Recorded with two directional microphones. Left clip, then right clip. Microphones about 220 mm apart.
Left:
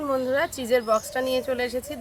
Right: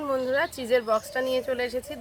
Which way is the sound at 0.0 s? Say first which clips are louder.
Left 1 dB; 5° right (ahead or behind).